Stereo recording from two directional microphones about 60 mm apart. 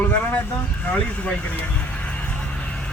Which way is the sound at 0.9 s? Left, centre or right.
Left.